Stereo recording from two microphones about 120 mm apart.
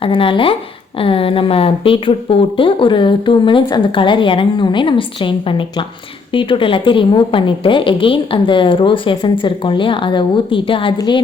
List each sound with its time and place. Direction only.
0.0 s a woman's voice: 45° left (ahead or behind)